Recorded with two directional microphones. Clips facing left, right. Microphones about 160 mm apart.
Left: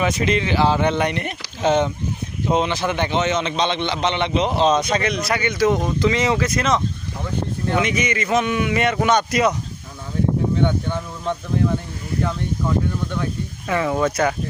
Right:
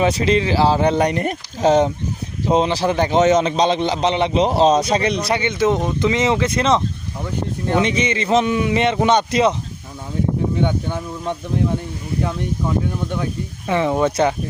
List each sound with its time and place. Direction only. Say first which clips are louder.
0.0 s a man's voice: right 3 dB; 30° right (ahead or behind)
10.6 s speech: even; 15° right (ahead or behind)
13.7 s a man's voice: right 3 dB; 25° right (ahead or behind)